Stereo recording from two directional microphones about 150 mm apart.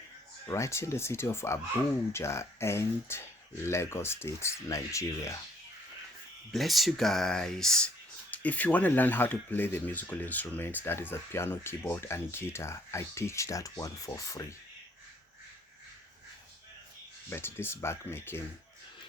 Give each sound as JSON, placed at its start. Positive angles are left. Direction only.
{"t": 0.4, "sound": "speech", "side_deg": 20}
{"t": 6.5, "sound": "speech", "side_deg": 0}
{"t": 17.2, "sound": "speech", "side_deg": 15}